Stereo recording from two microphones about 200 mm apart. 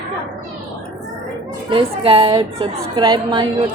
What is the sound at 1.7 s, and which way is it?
A woman's voice, 25° right (ahead or behind).